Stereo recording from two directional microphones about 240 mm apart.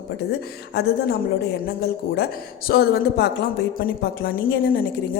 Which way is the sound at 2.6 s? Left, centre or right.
Left.